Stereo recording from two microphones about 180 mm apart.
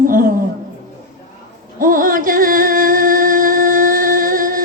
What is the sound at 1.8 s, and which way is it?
Music, 50° right (ahead or behind).